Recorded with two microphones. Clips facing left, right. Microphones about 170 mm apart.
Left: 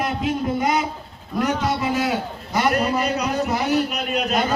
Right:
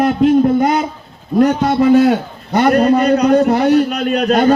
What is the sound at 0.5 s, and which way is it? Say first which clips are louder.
A man's voice: right 7 dB; 55° right (ahead or behind).